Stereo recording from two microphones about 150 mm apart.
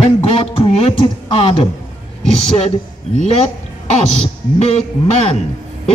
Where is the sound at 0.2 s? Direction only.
40° left (ahead or behind).